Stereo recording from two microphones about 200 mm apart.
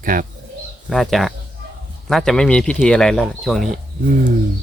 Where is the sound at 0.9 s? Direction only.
Centre (ahead or behind).